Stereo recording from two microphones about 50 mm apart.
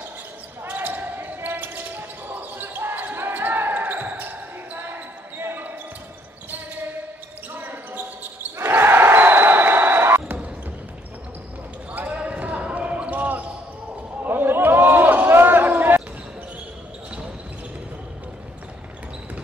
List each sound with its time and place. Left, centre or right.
0.7 s basketball bounce: right
7.5 s basketball bounce: right
8.5 s basketball bounce: right
11.9 s basketball bounce: right
14.2 s a sound: right